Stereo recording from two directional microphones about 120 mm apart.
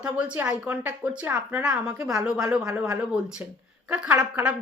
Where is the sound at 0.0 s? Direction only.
10° right (ahead or behind).